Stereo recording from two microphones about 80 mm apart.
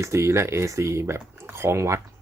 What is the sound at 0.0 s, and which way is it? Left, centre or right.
Speech, right.